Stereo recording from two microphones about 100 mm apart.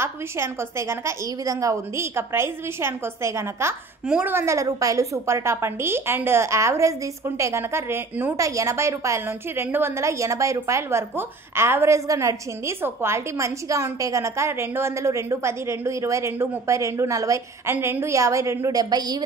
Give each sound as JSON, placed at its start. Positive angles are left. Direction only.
{"t": 0.0, "sound": "a woman's voice", "side_deg": -25}
{"t": 17.7, "sound": "a woman's voice", "side_deg": -20}